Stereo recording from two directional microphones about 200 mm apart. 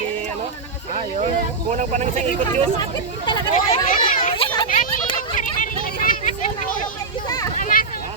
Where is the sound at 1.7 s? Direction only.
35° right (ahead or behind).